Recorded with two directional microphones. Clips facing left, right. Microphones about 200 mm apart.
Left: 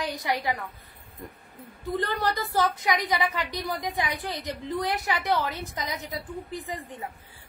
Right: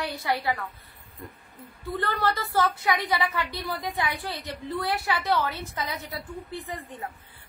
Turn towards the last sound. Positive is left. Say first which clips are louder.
# left 1 dB
turn(degrees=15)  # may be behind; listen again after turning